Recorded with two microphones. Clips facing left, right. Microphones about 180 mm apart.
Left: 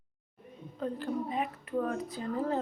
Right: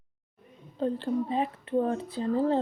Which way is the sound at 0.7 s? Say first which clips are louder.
Right 6 dB; 30° right (ahead or behind).